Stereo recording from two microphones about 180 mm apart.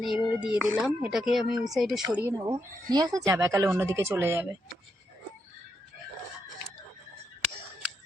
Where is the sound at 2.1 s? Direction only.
15° right (ahead or behind).